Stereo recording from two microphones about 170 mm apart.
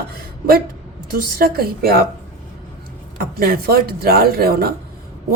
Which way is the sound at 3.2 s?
60° right (ahead or behind).